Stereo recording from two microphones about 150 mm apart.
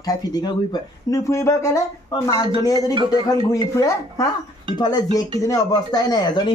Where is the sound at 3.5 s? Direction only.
25° left (ahead or behind).